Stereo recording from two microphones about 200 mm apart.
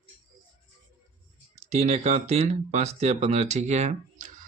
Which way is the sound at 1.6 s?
35° right (ahead or behind).